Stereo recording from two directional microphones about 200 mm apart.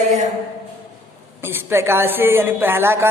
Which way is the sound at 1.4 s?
10° right (ahead or behind).